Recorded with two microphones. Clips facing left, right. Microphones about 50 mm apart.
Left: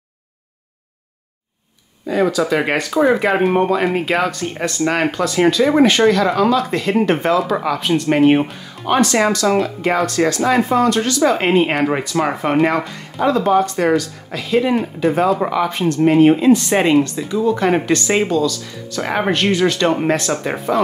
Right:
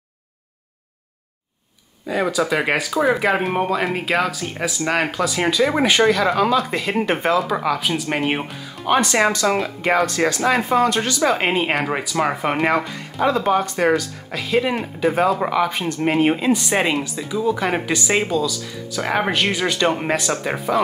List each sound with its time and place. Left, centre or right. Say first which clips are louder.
2.0 s speech: left 3 dB; centre
9.0 s speech: left 3 dB; centre
10.2 s speech: left 3 dB; centre
11.2 s speech: left 4 dB; centre